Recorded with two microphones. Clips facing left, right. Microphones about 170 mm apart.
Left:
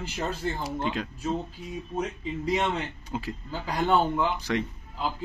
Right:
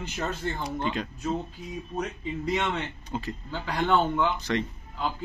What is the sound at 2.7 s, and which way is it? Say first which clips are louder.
Speech: even; 5° left (ahead or behind).